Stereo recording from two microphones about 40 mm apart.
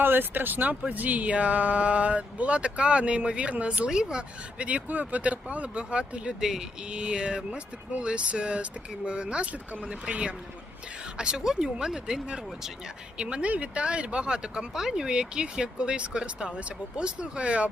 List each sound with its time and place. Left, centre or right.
0.0 s speech: right
6.4 s speech: centre
6.8 s speech: right
13.1 s speech: right
13.4 s speech: right